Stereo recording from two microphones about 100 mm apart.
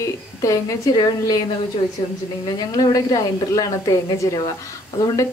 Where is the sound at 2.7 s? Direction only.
35° left (ahead or behind).